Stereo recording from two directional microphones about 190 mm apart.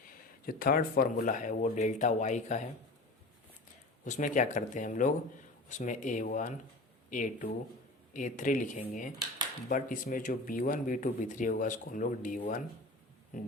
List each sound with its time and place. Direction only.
0.4 s speech: 50° left (ahead or behind)
4.0 s speech: 40° left (ahead or behind)